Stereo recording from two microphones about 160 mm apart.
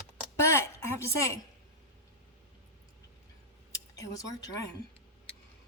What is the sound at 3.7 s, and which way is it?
Speech, 20° left (ahead or behind).